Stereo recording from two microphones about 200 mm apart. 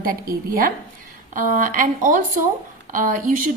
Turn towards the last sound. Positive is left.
turn(degrees=-40)  # may be behind; listen again after turning